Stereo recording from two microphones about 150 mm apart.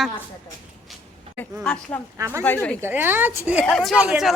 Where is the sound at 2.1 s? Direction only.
20° right (ahead or behind).